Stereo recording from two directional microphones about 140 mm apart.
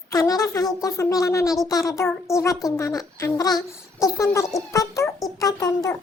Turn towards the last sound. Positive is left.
turn(degrees=25)  # may be behind; listen again after turning